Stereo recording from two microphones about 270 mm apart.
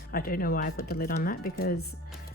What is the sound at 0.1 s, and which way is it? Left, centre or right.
Speech, left.